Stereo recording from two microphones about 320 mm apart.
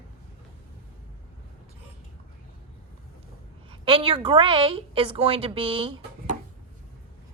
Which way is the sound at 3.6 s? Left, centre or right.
Centre.